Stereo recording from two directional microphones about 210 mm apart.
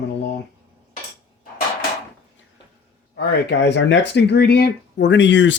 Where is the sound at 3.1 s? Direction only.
50° left (ahead or behind).